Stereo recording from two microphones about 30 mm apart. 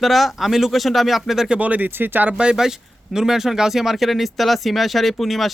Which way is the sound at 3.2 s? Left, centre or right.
Centre.